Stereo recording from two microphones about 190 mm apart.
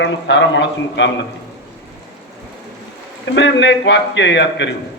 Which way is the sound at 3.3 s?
70° left (ahead or behind).